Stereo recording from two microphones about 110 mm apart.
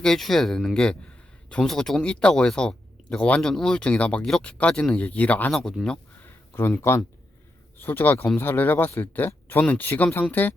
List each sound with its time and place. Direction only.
0.0 s speech: 5° left (ahead or behind)
6.5 s speech: 20° left (ahead or behind)